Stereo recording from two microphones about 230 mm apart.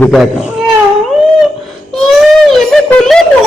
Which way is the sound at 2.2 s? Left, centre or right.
Centre.